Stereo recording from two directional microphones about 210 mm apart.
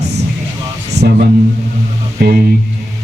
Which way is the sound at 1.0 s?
55° right (ahead or behind).